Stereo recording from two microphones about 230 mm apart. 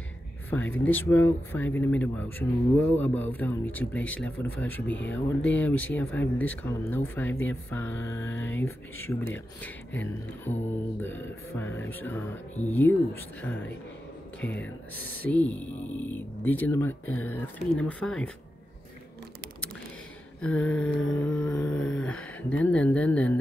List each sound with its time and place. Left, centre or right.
0.5 s speech: centre
15.2 s speech: centre
17.0 s speech: left
17.6 s speech: centre
20.4 s speech: centre